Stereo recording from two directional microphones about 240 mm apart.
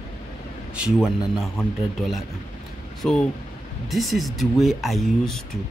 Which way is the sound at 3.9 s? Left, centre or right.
Centre.